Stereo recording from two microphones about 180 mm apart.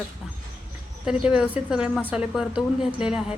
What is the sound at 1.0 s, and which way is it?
A woman's voice, 5° right (ahead or behind).